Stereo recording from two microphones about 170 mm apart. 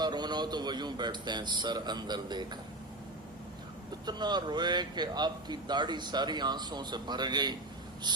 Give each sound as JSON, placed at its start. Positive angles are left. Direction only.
{"t": 0.0, "sound": "speech", "side_deg": -25}
{"t": 4.0, "sound": "speech", "side_deg": -25}
{"t": 8.1, "sound": "a sound", "side_deg": -25}